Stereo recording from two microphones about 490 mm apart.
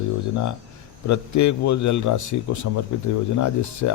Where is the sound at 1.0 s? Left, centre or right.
Left.